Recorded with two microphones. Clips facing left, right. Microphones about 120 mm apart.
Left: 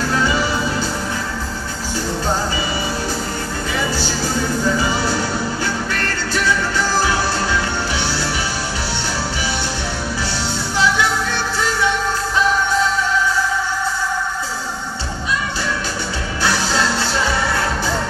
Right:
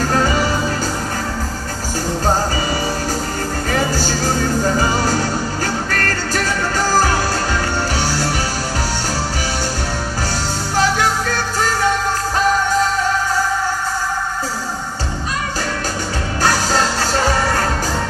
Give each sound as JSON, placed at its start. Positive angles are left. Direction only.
{"t": 0.0, "sound": "music", "side_deg": -45}
{"t": 3.7, "sound": "music", "side_deg": -40}
{"t": 10.8, "sound": "music", "side_deg": -45}
{"t": 16.4, "sound": "music", "side_deg": -45}